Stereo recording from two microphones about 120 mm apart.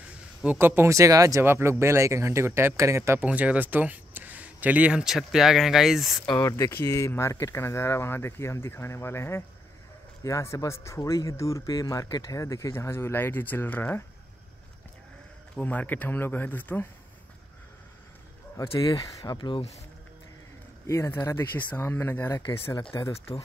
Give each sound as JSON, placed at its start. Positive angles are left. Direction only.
{"t": 0.6, "sound": "speech", "side_deg": -20}
{"t": 3.2, "sound": "speech", "side_deg": -10}
{"t": 6.2, "sound": "speech", "side_deg": 35}
{"t": 6.5, "sound": "speech", "side_deg": 20}
{"t": 15.5, "sound": "speech", "side_deg": 10}
{"t": 18.8, "sound": "speech", "side_deg": 30}
{"t": 20.8, "sound": "speech", "side_deg": 25}